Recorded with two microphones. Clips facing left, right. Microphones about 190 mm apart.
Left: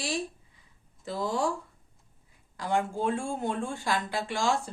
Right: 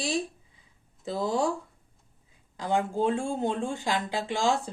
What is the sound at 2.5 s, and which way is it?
Speech, 20° right (ahead or behind).